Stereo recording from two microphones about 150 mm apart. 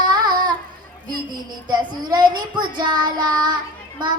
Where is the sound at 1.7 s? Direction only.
25° right (ahead or behind).